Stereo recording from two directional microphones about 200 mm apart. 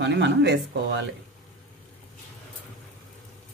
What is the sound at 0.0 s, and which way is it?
Speech, 60° right (ahead or behind).